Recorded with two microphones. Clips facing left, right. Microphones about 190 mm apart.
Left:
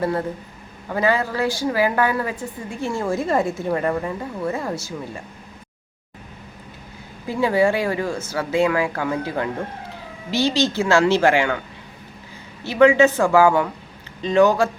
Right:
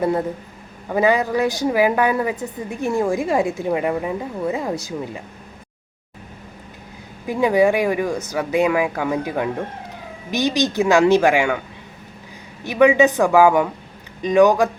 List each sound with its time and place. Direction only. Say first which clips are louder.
0.0 s a woman's voice: right 3 dB; 20° right (ahead or behind)
7.3 s a woman's voice: right 2 dB; 15° right (ahead or behind)
12.6 s a woman's voice: even; 15° right (ahead or behind)